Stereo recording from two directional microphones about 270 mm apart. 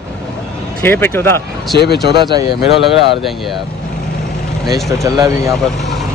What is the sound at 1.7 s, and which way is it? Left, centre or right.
Speech, left.